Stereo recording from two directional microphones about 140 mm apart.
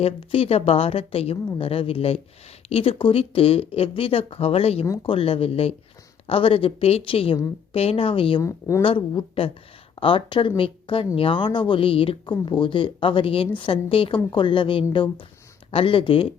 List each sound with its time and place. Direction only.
0.0 s a woman's voice: 45° left (ahead or behind)
8.4 s speech: 20° left (ahead or behind)
8.8 s speech: 40° left (ahead or behind)